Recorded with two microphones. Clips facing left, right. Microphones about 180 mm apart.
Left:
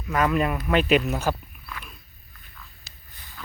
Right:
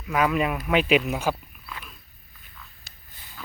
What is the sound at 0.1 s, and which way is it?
Speech, 5° right (ahead or behind).